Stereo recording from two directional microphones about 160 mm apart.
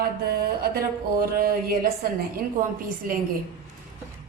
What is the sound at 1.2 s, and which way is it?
A woman's voice, 60° right (ahead or behind).